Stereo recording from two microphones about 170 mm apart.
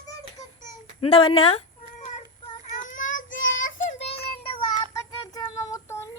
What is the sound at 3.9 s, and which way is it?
Child singing, 40° left (ahead or behind).